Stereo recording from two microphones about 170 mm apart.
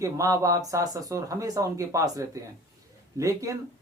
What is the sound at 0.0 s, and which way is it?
Speech, 20° right (ahead or behind).